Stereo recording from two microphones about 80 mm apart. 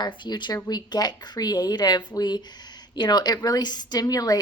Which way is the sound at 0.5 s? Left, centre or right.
Left.